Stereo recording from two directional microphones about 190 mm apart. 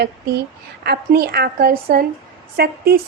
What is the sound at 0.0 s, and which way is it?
Speech, 55° right (ahead or behind).